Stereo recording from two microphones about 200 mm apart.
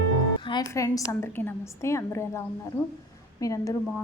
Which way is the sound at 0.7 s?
15° left (ahead or behind).